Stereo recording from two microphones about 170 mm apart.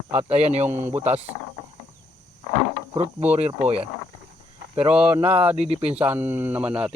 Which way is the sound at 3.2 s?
40° right (ahead or behind).